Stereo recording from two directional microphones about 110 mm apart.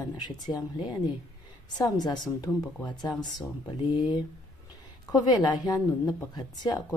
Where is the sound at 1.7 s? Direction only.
40° left (ahead or behind).